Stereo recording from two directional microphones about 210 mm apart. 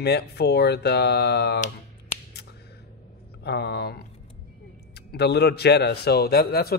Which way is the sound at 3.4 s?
50° left (ahead or behind).